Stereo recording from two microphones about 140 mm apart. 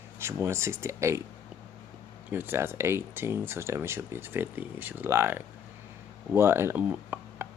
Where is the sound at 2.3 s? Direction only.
15° right (ahead or behind).